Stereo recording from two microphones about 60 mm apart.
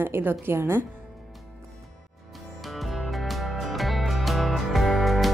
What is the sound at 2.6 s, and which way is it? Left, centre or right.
Music, centre.